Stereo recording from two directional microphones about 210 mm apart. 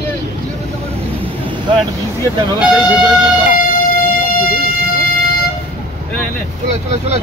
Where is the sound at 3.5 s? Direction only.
45° left (ahead or behind).